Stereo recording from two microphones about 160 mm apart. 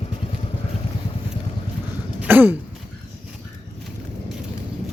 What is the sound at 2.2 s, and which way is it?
Throat clearing, 10° right (ahead or behind).